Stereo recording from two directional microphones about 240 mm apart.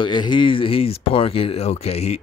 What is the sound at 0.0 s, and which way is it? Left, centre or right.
Speech, centre.